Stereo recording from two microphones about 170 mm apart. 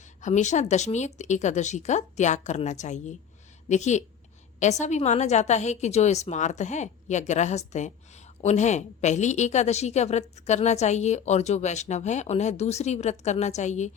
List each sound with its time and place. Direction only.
0.2 s a woman's voice: 45° left (ahead or behind)